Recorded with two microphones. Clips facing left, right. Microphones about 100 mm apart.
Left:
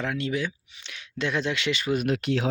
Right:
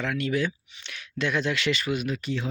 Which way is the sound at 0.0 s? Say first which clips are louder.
Right 1 dB; 25° left (ahead or behind).